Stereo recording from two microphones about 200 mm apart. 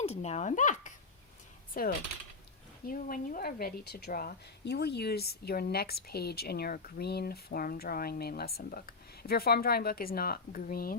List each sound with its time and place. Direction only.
0.0 s speech: 30° left (ahead or behind)